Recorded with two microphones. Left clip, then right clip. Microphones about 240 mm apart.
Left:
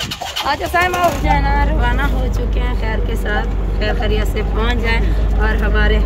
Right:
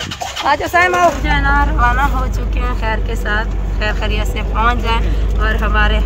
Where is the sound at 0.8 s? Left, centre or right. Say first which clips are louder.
Right 3 dB; left.